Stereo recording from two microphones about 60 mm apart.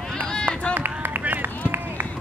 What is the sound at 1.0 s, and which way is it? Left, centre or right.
Run, right.